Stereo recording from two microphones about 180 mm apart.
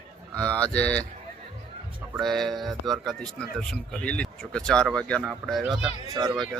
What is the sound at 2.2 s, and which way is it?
Speech, centre (ahead or behind).